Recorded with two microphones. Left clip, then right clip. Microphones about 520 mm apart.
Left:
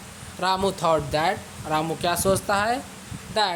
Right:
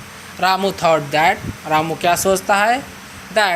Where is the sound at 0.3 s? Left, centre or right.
Left.